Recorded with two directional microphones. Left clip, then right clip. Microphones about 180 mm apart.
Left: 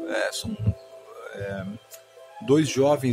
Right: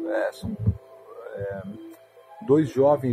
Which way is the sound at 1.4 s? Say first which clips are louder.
Right 1 dB; 15° left (ahead or behind).